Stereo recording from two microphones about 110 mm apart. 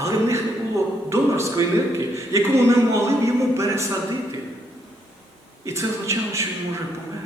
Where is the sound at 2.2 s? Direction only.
25° right (ahead or behind).